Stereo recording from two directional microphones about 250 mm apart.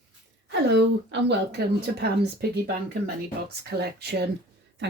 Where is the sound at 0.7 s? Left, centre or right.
Right.